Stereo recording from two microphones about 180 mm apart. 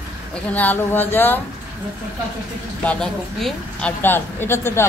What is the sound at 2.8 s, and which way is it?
Speech, 5° left (ahead or behind).